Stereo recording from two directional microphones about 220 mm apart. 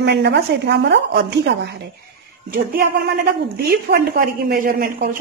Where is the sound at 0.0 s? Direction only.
50° right (ahead or behind).